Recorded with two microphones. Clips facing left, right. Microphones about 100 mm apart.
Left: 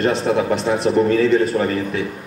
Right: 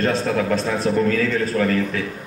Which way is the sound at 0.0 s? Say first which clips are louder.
Left 3 dB; 25° left (ahead or behind).